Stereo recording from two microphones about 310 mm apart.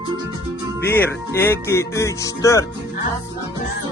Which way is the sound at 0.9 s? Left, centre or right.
Centre.